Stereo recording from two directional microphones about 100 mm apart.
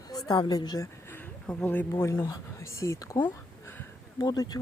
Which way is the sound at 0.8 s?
20° left (ahead or behind).